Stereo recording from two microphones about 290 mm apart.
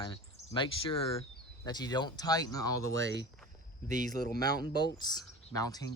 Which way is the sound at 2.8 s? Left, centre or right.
Right.